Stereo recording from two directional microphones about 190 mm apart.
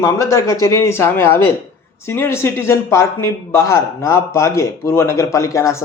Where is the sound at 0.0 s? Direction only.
15° left (ahead or behind).